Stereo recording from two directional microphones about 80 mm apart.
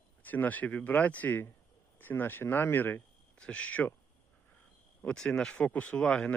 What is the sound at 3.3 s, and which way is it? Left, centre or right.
Speech, centre.